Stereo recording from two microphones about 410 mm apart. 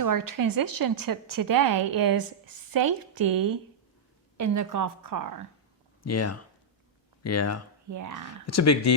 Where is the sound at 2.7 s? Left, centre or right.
Right.